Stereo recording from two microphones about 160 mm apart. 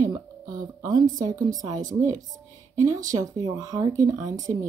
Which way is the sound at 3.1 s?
20° right (ahead or behind).